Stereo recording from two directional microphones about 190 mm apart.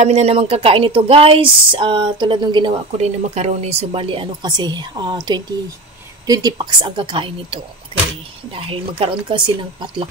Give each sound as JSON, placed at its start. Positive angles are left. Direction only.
{"t": 0.0, "sound": "a woman's voice", "side_deg": -35}
{"t": 3.0, "sound": "a woman's voice", "side_deg": -35}